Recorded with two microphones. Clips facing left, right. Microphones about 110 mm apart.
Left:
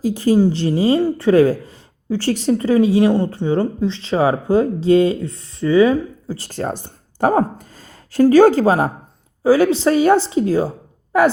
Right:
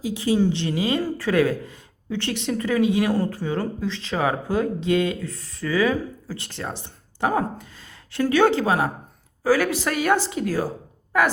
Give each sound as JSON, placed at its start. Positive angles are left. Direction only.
{"t": 0.0, "sound": "speech", "side_deg": 45}
{"t": 9.4, "sound": "speech", "side_deg": 25}